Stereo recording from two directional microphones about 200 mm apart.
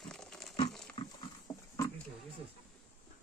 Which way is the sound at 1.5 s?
20° left (ahead or behind).